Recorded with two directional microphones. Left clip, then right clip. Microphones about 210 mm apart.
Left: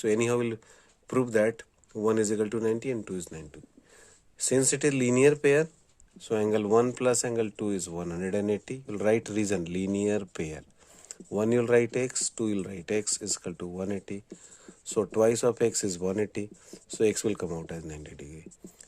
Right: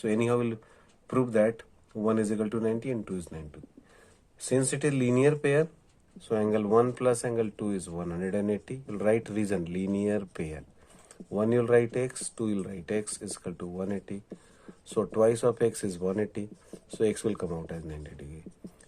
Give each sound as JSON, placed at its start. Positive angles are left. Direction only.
{"t": 0.0, "sound": "speech", "side_deg": 40}